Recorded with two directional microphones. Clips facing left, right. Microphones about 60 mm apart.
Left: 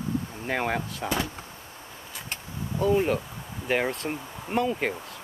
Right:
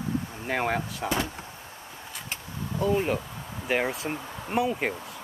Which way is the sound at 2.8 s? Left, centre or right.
Centre.